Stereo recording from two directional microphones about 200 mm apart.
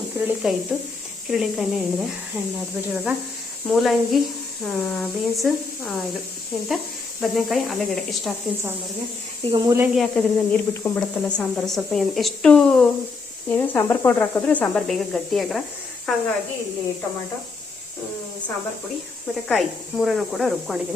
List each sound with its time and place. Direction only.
0.2 s speech: 5° right (ahead or behind)
0.7 s a woman's voice: 5° left (ahead or behind)
7.2 s a woman's voice: centre (ahead or behind)
9.4 s speech: 25° right (ahead or behind)
9.7 s a woman's voice: 5° right (ahead or behind)
19.5 s a woman's voice: centre (ahead or behind)